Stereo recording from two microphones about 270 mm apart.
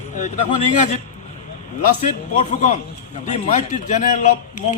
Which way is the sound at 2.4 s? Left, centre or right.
Left.